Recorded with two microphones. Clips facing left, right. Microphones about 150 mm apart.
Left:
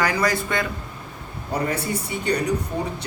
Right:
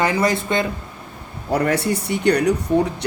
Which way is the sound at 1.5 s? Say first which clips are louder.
Right 6 dB; 75° right (ahead or behind).